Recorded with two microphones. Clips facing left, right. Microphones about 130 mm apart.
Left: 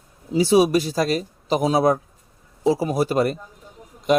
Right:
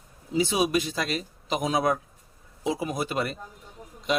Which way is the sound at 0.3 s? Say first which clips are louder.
Left 8 dB; 35° left (ahead or behind).